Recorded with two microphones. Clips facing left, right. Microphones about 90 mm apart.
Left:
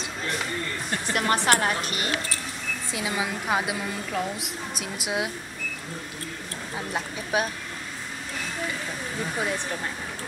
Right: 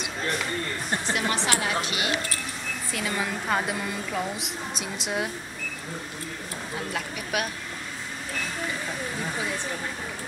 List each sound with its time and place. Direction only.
1.1 s a woman's voice: 50° left (ahead or behind)
2.9 s a woman's voice: 15° left (ahead or behind)
7.3 s speech: 30° left (ahead or behind)